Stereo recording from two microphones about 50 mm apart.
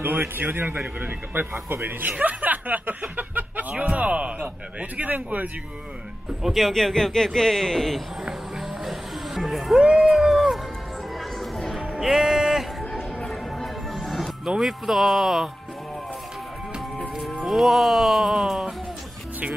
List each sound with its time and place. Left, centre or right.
0.0 s a man's voice: right
1.5 s a man's voice: right
4.0 s a man's voice: right
6.4 s a man's voice: centre
8.3 s music: centre
9.8 s a man's voice: centre
10.1 s music: centre
12.0 s music: centre
13.3 s music: centre
17.5 s music: centre